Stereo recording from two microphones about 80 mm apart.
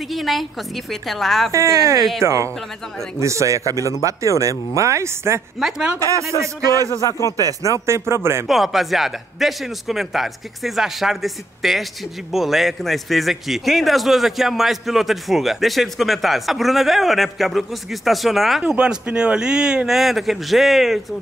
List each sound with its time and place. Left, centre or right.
0.1 s a man's voice: centre
1.5 s speech: right
2.0 s a man's voice: centre
2.2 s speech: right
5.6 s a man's voice: centre
7.0 s speech: left
7.4 s speech: right
8.5 s a man's voice: centre